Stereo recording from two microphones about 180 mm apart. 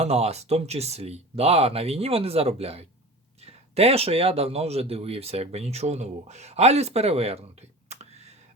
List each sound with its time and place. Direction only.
0.0 s speech: 35° right (ahead or behind)
7.9 s computer keyboard: 35° right (ahead or behind)